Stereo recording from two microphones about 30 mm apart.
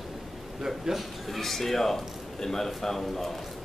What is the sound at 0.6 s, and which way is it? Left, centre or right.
Speech, centre.